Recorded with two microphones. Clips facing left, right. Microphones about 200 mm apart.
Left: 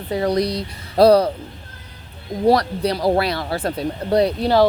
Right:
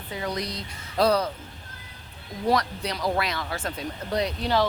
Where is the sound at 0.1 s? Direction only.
35° left (ahead or behind).